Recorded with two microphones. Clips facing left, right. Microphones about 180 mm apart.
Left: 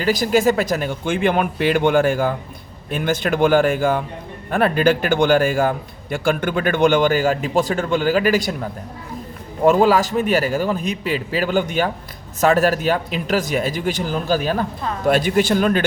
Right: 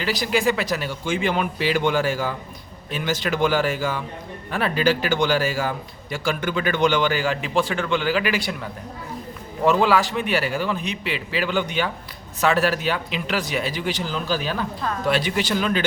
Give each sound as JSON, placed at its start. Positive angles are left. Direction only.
{"t": 0.0, "sound": "a man's voice", "side_deg": 45}
{"t": 9.6, "sound": "a man's voice", "side_deg": 40}